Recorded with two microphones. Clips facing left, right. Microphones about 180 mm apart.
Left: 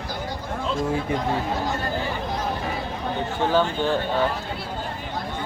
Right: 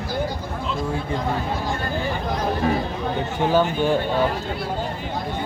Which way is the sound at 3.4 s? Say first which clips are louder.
Right 2 dB; 10° right (ahead or behind).